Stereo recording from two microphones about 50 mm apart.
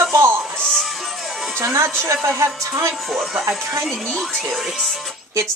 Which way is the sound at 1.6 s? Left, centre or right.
Right.